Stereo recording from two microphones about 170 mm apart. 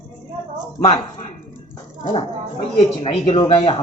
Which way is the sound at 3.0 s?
35° left (ahead or behind).